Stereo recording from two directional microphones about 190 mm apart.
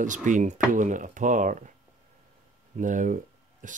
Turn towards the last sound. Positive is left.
turn(degrees=-40)  # may be behind; listen again after turning